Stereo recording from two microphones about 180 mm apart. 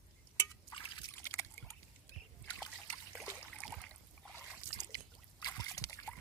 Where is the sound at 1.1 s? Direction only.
15° left (ahead or behind).